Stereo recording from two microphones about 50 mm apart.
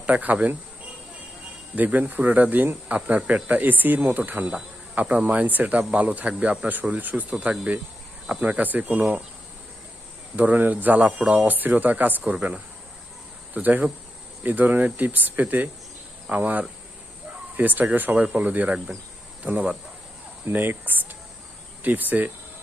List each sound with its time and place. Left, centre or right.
0.0 s speech: right
1.7 s speech: right
10.3 s speech: right
11.2 s speech: centre
11.4 s speech: right
12.2 s speech: right
13.5 s speech: right
20.5 s speech: right